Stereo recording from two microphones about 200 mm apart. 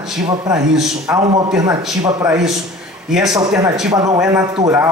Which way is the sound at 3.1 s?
Centre (ahead or behind).